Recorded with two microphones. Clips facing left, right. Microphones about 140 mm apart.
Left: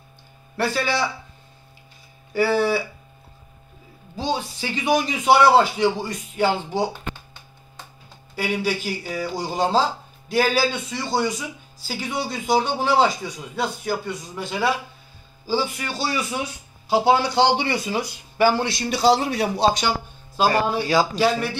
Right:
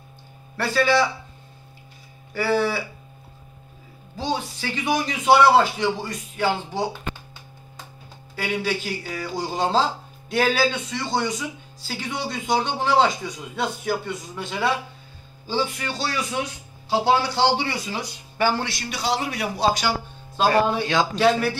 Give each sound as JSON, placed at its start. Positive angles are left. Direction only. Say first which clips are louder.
{"t": 2.3, "sound": "speech", "louder": "left 2 dB", "side_deg": 10}
{"t": 4.6, "sound": "speech", "louder": "left 6 dB", "side_deg": 15}
{"t": 8.4, "sound": "speech", "louder": "left 2 dB", "side_deg": 5}
{"t": 18.9, "sound": "speech", "louder": "left 8 dB", "side_deg": 30}
{"t": 20.3, "sound": "speech", "louder": "right 1 dB", "side_deg": 0}